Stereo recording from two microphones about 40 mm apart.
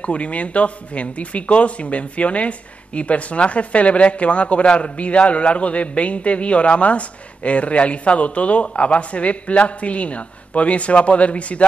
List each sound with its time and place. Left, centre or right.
0.0 s a man's voice: left